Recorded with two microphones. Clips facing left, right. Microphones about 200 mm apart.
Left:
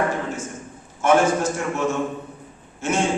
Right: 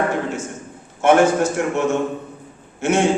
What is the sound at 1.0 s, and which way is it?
Speech, 70° right (ahead or behind).